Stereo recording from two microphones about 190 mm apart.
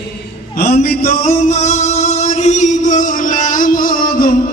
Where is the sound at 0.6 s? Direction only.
55° left (ahead or behind).